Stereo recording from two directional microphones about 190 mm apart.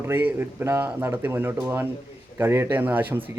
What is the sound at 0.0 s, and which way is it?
Speech, 10° right (ahead or behind).